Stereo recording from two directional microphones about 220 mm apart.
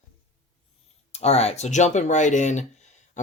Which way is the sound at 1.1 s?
30° left (ahead or behind).